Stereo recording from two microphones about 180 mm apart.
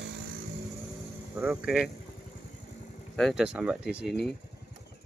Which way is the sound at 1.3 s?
10° right (ahead or behind).